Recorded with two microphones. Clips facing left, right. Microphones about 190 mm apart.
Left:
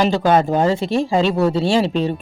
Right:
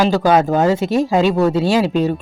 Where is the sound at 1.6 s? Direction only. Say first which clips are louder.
Right 1 dB; 30° left (ahead or behind).